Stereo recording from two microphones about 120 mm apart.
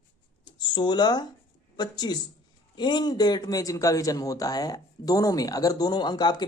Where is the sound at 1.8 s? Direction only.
35° left (ahead or behind).